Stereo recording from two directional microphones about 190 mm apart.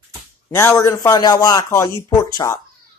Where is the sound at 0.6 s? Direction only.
15° left (ahead or behind).